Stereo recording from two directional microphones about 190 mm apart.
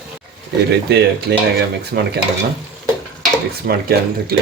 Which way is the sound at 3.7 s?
55° right (ahead or behind).